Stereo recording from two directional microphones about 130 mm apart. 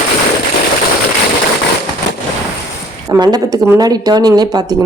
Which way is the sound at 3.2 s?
30° right (ahead or behind).